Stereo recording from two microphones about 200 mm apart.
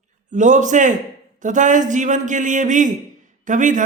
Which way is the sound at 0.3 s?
40° right (ahead or behind).